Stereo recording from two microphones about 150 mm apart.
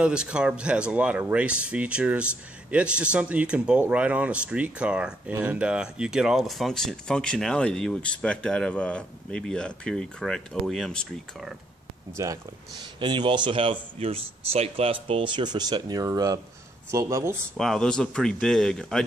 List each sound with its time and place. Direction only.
0.0 s speech: 5° right (ahead or behind)
12.2 s speech: 20° right (ahead or behind)
17.6 s speech: 5° left (ahead or behind)